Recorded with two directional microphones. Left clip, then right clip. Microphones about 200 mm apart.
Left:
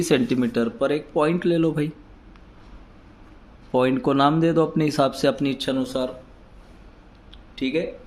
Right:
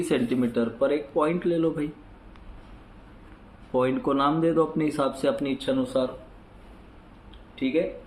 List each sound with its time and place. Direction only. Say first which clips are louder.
0.0 s speech: left 4 dB; 60° left (ahead or behind)
3.7 s speech: left 4 dB; 50° left (ahead or behind)
7.5 s speech: left 2 dB; 60° left (ahead or behind)